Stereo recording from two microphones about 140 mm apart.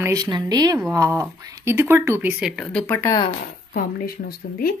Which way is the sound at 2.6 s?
10° left (ahead or behind).